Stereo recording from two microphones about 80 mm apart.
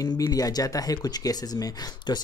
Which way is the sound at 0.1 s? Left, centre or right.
Left.